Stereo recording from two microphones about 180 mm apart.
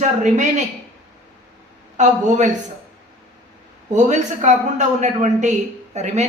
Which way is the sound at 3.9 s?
40° right (ahead or behind).